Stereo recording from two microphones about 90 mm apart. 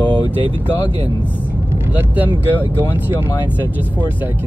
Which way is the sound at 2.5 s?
25° left (ahead or behind).